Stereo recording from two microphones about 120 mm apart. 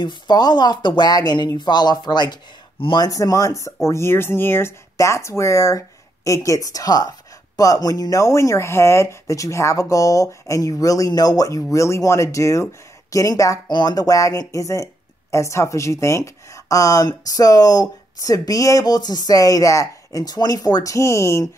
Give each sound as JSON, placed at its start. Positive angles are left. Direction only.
{"t": 0.0, "sound": "speech", "side_deg": 35}